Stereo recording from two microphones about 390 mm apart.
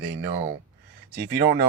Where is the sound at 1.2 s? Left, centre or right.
Right.